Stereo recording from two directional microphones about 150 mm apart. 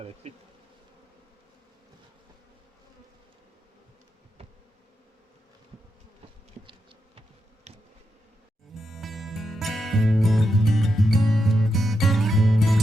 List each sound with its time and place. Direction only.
0.0 s bee: 45° right (ahead or behind)
7.7 s bee: 45° right (ahead or behind)
8.8 s music: centre (ahead or behind)